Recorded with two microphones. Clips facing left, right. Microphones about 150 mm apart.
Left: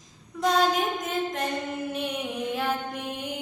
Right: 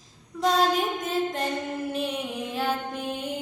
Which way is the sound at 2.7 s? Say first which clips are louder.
Right 1 dB; 30° right (ahead or behind).